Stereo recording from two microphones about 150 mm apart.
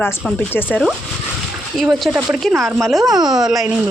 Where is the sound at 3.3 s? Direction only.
5° right (ahead or behind).